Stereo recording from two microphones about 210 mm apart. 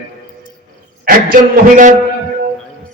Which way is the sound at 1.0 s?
40° right (ahead or behind).